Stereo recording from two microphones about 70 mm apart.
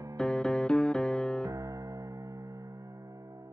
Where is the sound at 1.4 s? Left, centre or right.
Right.